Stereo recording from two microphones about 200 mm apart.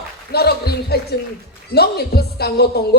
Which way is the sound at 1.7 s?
55° left (ahead or behind).